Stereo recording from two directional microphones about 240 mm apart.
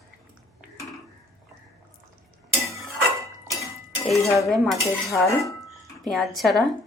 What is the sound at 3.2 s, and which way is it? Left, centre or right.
Dishes, centre.